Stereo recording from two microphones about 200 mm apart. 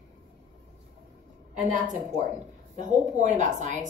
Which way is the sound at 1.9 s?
35° right (ahead or behind).